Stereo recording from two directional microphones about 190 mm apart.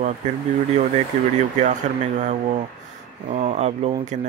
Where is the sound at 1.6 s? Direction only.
40° right (ahead or behind).